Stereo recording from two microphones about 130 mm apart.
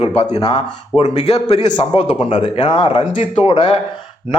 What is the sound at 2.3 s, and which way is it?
A man's voice, 45° left (ahead or behind).